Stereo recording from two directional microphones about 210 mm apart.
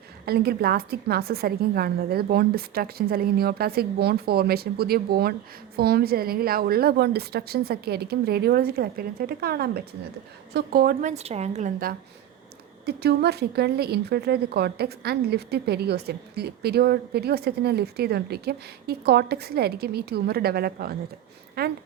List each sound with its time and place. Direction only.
0.3 s a woman's voice: 50° right (ahead or behind)
11.1 s a woman's voice: 30° right (ahead or behind)
12.8 s a woman's voice: 50° right (ahead or behind)